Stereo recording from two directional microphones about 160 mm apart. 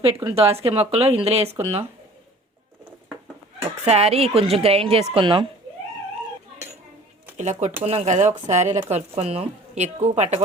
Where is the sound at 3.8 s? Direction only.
40° right (ahead or behind).